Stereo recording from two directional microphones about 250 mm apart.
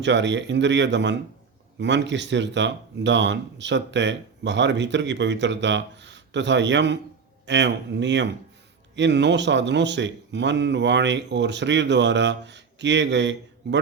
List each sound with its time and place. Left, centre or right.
0.0 s speech: right